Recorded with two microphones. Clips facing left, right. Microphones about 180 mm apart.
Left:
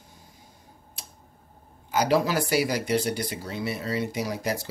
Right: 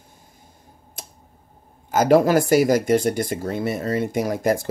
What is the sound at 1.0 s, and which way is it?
Tick-tock, 50° right (ahead or behind).